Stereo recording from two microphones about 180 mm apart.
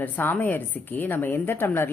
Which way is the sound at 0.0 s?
10° left (ahead or behind).